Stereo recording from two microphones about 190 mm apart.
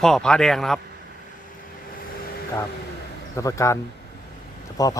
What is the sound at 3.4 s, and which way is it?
Speech, 15° left (ahead or behind).